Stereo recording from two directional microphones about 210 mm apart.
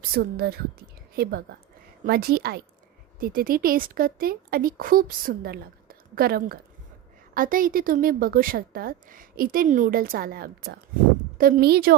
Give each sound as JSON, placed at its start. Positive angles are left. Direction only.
{"t": 0.2, "sound": "a woman's voice", "side_deg": -45}